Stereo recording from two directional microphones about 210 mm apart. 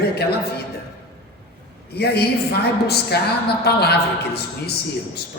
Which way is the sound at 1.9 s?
50° left (ahead or behind).